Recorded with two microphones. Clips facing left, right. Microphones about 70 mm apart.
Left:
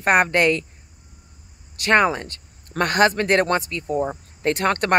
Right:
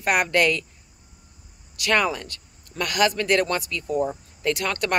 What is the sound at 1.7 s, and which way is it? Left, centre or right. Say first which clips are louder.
Speech: left 5 dB; left.